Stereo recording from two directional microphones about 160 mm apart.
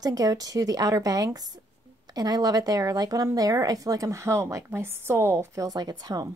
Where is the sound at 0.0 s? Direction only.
25° right (ahead or behind).